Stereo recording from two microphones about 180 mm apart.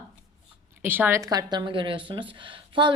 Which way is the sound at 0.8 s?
10° right (ahead or behind).